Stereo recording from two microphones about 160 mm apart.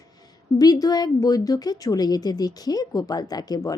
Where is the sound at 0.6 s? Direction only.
25° left (ahead or behind).